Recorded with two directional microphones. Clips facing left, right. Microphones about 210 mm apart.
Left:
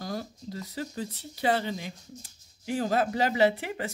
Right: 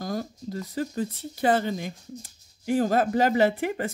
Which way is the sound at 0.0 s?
50° right (ahead or behind).